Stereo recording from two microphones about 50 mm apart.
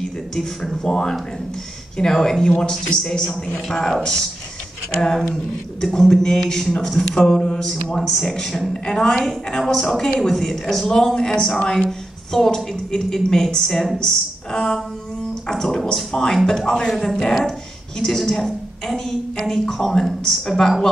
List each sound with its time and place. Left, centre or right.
0.0 s a woman's voice: centre
12.3 s a woman's voice: centre